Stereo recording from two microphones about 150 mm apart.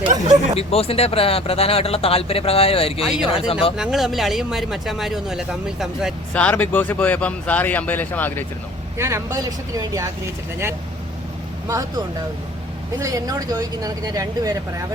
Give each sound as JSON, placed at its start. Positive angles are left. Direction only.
{"t": 0.1, "sound": "speech", "side_deg": -55}
{"t": 0.7, "sound": "speech", "side_deg": 40}
{"t": 3.0, "sound": "speech", "side_deg": -5}
{"t": 3.3, "sound": "speech", "side_deg": 40}
{"t": 3.8, "sound": "speech", "side_deg": 0}
{"t": 6.3, "sound": "speech", "side_deg": 10}
{"t": 9.0, "sound": "speech", "side_deg": -20}
{"t": 11.7, "sound": "speech", "side_deg": -20}